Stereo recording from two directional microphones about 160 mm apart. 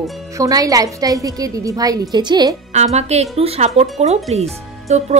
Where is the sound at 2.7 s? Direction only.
45° right (ahead or behind).